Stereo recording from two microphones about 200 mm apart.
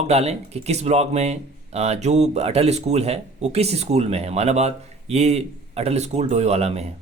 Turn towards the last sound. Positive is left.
turn(degrees=-30)  # may be behind; listen again after turning